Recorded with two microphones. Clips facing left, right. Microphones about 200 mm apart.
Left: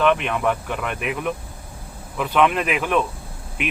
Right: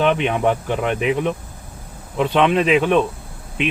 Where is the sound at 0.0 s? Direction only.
30° right (ahead or behind).